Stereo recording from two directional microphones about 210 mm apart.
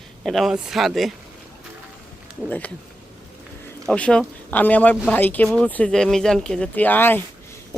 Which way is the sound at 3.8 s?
5° left (ahead or behind).